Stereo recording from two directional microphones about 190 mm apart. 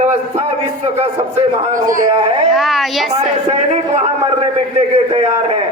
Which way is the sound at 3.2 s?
35° right (ahead or behind).